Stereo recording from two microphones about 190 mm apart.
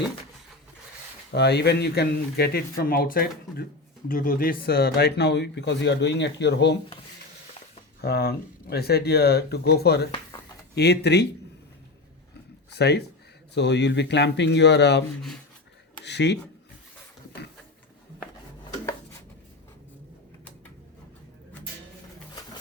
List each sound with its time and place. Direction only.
1.3 s speech: 60° left (ahead or behind)
8.0 s speech: 55° left (ahead or behind)
12.7 s speech: 60° left (ahead or behind)
16.0 s speech: 65° left (ahead or behind)